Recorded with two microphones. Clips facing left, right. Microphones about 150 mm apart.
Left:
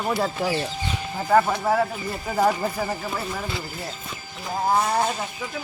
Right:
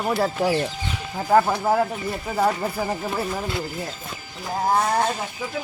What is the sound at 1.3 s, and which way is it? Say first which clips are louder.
Child singing: right 1 dB; 5° right (ahead or behind).